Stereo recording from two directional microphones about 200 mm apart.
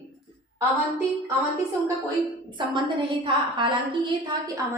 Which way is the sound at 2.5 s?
25° right (ahead or behind).